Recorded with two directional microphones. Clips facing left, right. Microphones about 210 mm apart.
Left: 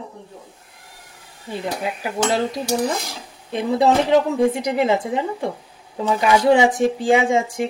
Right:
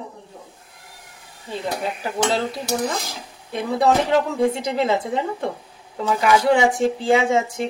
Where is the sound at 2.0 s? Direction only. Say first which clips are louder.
Left 2 dB; 15° left (ahead or behind).